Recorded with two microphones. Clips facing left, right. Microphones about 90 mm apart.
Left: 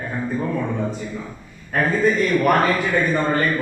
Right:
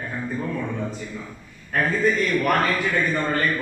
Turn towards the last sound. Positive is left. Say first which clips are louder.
# left 3 dB
turn(degrees=10)  # may be behind; listen again after turning